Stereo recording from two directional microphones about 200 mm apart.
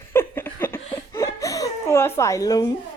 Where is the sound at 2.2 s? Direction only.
15° left (ahead or behind).